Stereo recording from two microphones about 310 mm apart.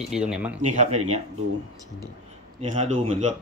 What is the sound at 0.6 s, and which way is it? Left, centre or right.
Speech, right.